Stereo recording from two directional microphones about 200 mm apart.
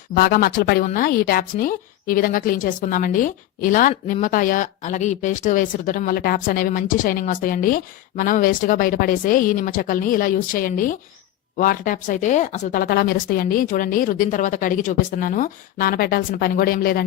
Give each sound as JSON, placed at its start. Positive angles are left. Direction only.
{"t": 0.1, "sound": "a woman's voice", "side_deg": 50}